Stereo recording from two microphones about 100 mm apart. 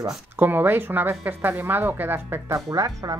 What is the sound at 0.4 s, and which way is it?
A woman's voice, 20° right (ahead or behind).